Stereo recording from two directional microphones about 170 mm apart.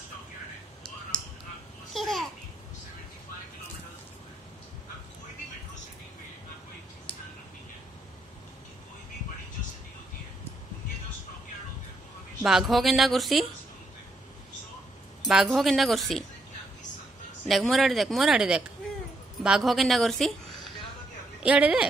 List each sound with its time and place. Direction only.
2.0 s babbling: centre (ahead or behind)
7.1 s a sound: 10° left (ahead or behind)
12.4 s speech: centre (ahead or behind)
15.2 s speech: centre (ahead or behind)
17.5 s speech: centre (ahead or behind)
21.4 s speech: 5° right (ahead or behind)